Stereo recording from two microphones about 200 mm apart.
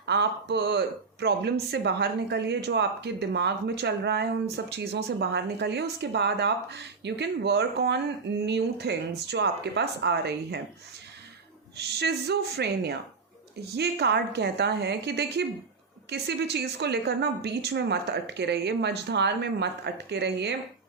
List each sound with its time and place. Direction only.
0.0 s a woman's voice: 60° right (ahead or behind)
11.8 s a woman's voice: 55° right (ahead or behind)